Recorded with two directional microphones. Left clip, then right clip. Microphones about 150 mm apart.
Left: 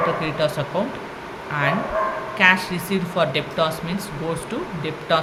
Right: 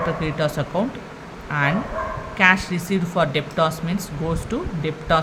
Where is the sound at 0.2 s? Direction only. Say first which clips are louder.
Left 1 dB; 40° right (ahead or behind).